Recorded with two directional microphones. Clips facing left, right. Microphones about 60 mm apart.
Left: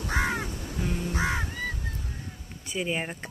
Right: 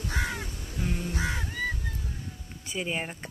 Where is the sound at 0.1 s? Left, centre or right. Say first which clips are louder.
Left 5 dB; left.